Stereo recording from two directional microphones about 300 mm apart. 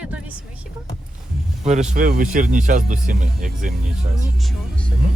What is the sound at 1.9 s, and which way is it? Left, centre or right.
Speech, right.